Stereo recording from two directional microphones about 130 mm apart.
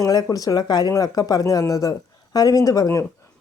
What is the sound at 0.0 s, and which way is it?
Speech, 30° left (ahead or behind).